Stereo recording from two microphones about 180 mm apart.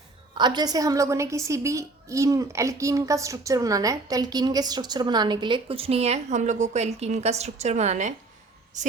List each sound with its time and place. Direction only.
0.3 s a woman's voice: 25° right (ahead or behind); by 8.9 s 45° right (ahead or behind)